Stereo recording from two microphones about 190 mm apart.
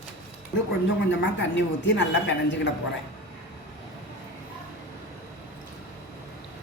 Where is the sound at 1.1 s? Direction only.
70° left (ahead or behind).